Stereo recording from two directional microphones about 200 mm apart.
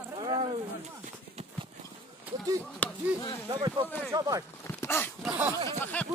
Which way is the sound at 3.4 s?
25° right (ahead or behind).